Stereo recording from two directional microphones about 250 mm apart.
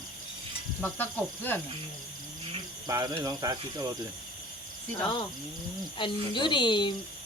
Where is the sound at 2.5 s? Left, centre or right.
Centre.